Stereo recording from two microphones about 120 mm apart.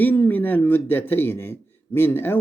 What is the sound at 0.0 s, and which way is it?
Speech, 15° left (ahead or behind).